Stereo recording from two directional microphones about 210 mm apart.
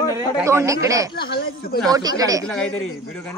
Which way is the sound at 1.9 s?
20° right (ahead or behind).